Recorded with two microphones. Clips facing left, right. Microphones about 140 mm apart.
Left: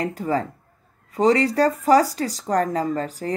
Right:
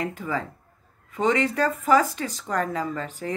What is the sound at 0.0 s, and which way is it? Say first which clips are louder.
Speech: left 5 dB; 40° left (ahead or behind).